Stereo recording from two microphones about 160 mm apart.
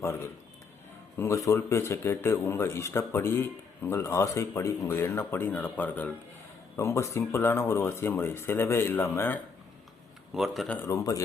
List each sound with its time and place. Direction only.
1.1 s speech: 15° left (ahead or behind)
10.3 s speech: centre (ahead or behind)
10.8 s speech: 20° left (ahead or behind)